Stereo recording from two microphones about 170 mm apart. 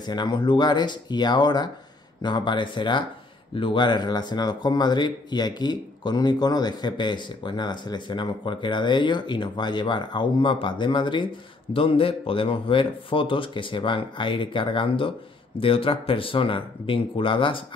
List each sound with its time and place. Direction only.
0.0 s speech: 25° left (ahead or behind)